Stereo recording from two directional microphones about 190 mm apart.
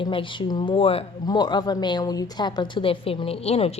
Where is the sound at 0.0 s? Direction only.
25° left (ahead or behind).